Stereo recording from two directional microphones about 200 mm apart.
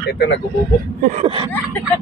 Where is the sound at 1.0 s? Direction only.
35° right (ahead or behind).